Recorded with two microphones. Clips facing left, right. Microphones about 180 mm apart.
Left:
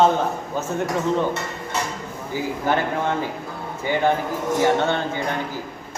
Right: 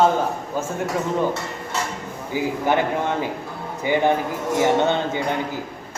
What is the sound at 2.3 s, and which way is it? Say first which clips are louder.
Speech: right 3 dB; 15° right (ahead or behind).